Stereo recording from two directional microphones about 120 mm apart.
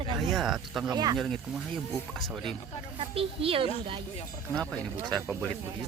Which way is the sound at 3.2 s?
50° right (ahead or behind).